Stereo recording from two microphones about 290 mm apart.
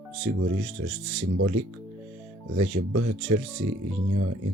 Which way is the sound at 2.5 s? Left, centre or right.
Right.